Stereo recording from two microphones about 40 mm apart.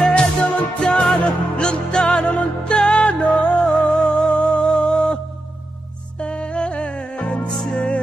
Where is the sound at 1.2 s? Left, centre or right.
Left.